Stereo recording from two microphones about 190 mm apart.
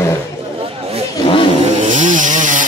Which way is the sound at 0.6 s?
30° right (ahead or behind).